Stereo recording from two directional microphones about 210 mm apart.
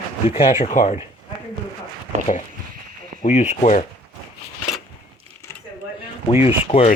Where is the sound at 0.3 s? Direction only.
30° left (ahead or behind).